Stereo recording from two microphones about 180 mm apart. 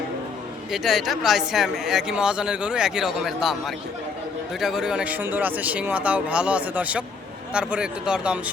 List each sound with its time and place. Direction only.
0.7 s speech: centre (ahead or behind)